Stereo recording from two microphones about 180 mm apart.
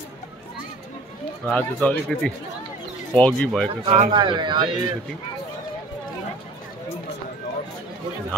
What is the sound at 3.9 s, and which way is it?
Speech, 30° right (ahead or behind).